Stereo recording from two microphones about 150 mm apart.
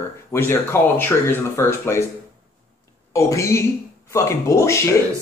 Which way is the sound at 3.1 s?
20° left (ahead or behind).